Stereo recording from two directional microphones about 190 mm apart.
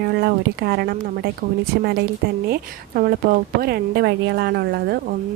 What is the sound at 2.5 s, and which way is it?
Speech, 50° right (ahead or behind).